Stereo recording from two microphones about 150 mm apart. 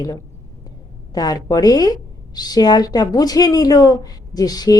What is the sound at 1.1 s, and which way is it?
A woman's voice, 25° left (ahead or behind).